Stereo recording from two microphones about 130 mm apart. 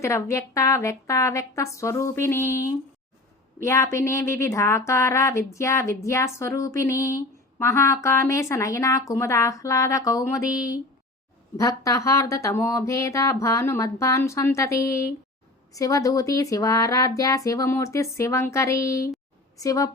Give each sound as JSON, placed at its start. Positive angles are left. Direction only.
{"t": 0.0, "sound": "speech", "side_deg": 20}